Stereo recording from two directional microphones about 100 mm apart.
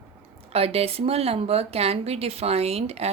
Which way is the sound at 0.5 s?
90° right.